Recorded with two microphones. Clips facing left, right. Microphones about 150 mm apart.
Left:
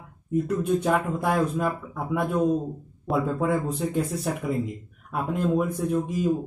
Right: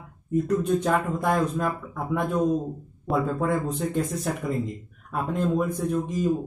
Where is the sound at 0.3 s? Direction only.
10° left (ahead or behind).